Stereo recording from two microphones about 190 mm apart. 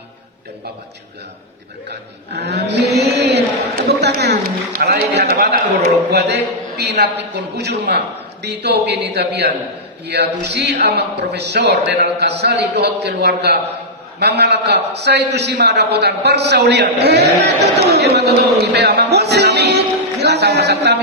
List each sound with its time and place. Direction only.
2.3 s speech: 60° right (ahead or behind)
18.6 s music: 65° right (ahead or behind)